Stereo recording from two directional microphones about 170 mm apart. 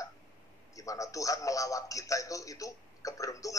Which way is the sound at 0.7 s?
20° left (ahead or behind).